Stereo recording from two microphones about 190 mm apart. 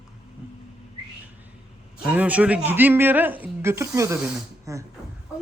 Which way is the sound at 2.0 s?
5° right (ahead or behind).